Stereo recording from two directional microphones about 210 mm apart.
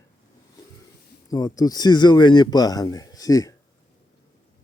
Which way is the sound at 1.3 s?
15° left (ahead or behind).